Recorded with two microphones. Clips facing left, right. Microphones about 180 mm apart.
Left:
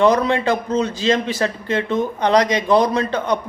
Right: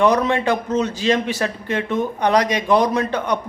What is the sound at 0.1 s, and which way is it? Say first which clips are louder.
A man's voice: left 1 dB; 15° right (ahead or behind).